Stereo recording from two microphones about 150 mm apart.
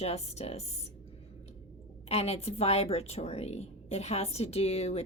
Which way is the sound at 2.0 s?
45° left (ahead or behind).